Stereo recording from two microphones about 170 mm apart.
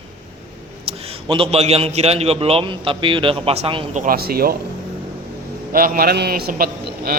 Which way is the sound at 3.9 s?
60° right (ahead or behind).